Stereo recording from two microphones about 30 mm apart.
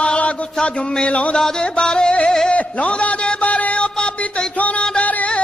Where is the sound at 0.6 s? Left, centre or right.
Left.